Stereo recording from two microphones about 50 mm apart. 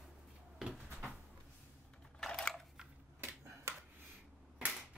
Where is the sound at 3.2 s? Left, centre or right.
Right.